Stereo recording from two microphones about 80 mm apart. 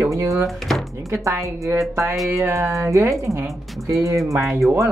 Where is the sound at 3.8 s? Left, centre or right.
Right.